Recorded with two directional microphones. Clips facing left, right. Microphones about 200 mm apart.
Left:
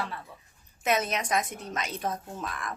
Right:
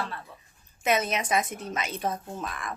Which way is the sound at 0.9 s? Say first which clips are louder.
Right 2 dB; centre (ahead or behind).